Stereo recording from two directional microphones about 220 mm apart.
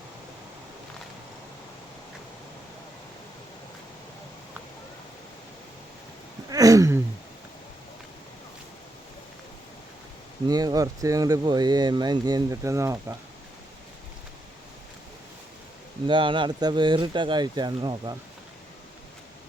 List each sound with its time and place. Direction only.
6.5 s a sound: 15° right (ahead or behind)
10.5 s speech: 15° right (ahead or behind)
16.0 s speech: 20° right (ahead or behind)